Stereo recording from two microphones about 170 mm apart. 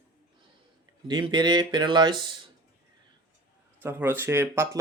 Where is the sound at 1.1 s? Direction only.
25° right (ahead or behind).